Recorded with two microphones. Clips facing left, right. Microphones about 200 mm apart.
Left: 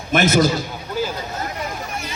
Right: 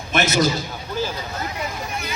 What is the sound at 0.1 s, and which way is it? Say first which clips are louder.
Speech: left 4 dB; 50° left (ahead or behind).